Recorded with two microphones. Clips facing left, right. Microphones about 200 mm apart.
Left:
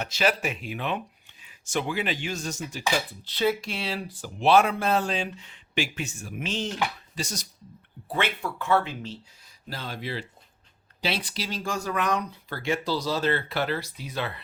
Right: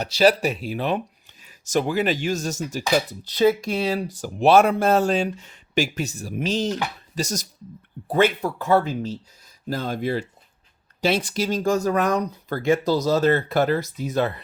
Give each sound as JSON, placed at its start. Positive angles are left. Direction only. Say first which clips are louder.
{"t": 0.0, "sound": "speech", "louder": "right 8 dB", "side_deg": -35}